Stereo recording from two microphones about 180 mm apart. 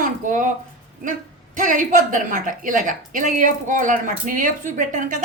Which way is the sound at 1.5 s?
45° right (ahead or behind).